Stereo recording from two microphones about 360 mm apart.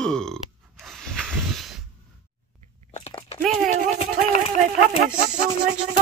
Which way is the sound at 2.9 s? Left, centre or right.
Centre.